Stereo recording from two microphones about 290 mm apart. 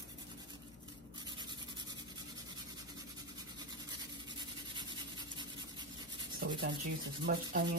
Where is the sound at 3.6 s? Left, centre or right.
Centre.